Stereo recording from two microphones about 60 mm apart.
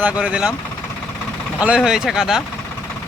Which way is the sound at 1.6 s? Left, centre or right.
Centre.